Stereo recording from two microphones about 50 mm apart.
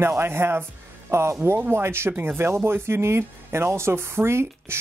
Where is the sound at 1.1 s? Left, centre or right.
Right.